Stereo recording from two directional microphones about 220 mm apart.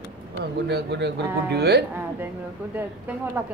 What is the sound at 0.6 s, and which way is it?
A man's voice, 50° right (ahead or behind).